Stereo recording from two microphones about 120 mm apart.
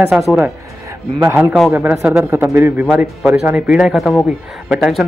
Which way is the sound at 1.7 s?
20° right (ahead or behind).